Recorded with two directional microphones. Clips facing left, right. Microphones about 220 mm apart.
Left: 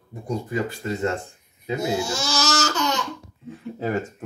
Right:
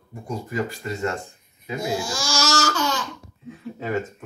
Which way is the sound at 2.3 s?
20° left (ahead or behind).